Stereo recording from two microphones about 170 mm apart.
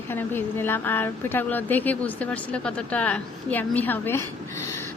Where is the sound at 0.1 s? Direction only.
10° left (ahead or behind).